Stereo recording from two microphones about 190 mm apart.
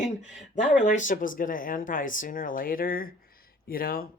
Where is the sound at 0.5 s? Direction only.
40° left (ahead or behind).